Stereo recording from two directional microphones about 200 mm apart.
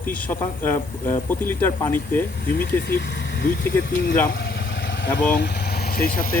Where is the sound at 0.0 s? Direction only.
10° left (ahead or behind).